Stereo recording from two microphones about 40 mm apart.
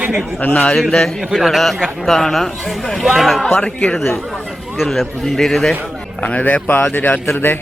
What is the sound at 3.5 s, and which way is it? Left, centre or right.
Speech, left.